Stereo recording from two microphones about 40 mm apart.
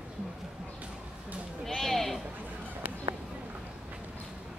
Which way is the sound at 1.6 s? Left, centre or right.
Centre.